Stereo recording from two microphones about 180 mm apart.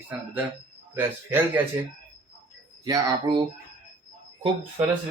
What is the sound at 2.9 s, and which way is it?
Speech, 20° right (ahead or behind).